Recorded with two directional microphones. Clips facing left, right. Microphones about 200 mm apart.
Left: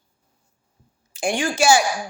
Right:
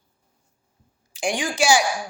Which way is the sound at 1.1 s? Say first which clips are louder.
Left 2 dB; 15° right (ahead or behind).